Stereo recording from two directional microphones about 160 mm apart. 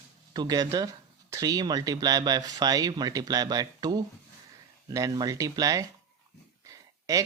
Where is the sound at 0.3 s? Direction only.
25° right (ahead or behind).